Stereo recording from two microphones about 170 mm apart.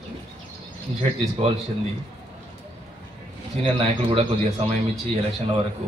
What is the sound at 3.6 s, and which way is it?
A man's voice, 35° right (ahead or behind).